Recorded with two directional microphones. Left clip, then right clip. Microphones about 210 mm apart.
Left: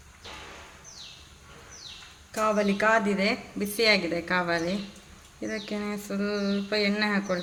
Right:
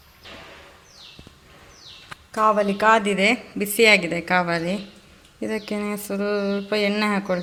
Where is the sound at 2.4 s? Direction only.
15° right (ahead or behind); by 4.7 s 30° right (ahead or behind).